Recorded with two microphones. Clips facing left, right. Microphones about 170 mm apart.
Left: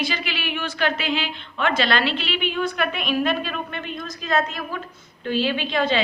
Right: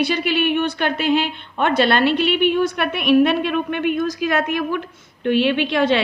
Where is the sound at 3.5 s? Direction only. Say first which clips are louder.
Right 10 dB; 70° right (ahead or behind).